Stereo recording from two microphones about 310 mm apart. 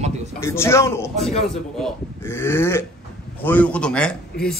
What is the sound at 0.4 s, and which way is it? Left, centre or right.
A man's voice, centre.